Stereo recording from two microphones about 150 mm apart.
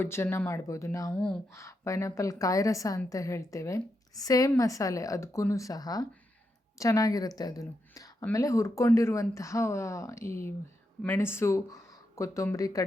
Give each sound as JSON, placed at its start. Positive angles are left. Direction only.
{"t": 0.0, "sound": "speech", "side_deg": 15}
{"t": 1.1, "sound": "speech", "side_deg": 5}
{"t": 1.5, "sound": "a woman's voice", "side_deg": 20}